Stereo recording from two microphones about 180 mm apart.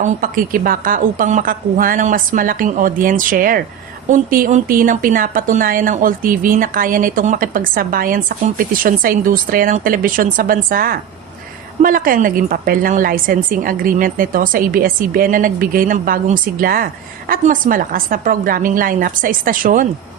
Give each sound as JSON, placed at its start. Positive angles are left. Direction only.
{"t": 0.0, "sound": "a woman's voice", "side_deg": -50}